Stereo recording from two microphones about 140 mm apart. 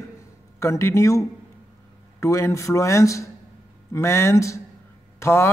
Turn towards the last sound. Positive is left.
turn(degrees=20)  # may be behind; listen again after turning